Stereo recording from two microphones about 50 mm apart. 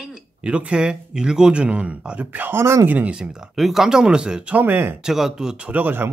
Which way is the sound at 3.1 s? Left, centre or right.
Centre.